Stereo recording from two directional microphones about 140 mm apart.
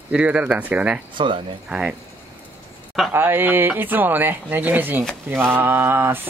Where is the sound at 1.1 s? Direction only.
35° right (ahead or behind).